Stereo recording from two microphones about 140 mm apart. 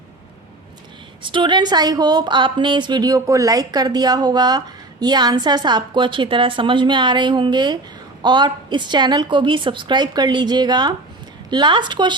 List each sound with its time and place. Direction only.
1.2 s a woman's voice: 35° right (ahead or behind)